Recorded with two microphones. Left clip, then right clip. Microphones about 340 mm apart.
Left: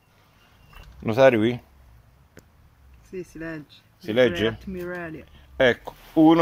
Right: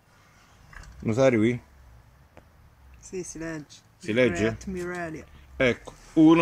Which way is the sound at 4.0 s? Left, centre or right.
Left.